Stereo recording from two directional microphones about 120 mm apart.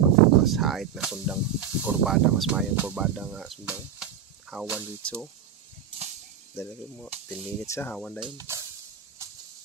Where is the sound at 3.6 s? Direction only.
10° right (ahead or behind).